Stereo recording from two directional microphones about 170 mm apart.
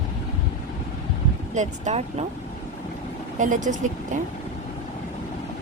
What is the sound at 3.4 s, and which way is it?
Speech, 45° right (ahead or behind).